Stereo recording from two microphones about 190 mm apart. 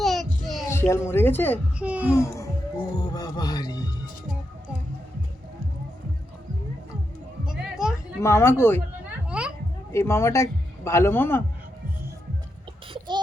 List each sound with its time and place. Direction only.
0.0 s a sound: centre (ahead or behind)
0.7 s speech: 15° left (ahead or behind)
1.8 s a child's voice: 5° right (ahead or behind)
2.1 s a sound: 15° left (ahead or behind)
2.9 s music: 20° left (ahead or behind)
7.4 s music: 5° right (ahead or behind)
8.2 s speech: 15° left (ahead or behind)
9.3 s children playing: 5° right (ahead or behind)
9.9 s a man's voice: 15° left (ahead or behind)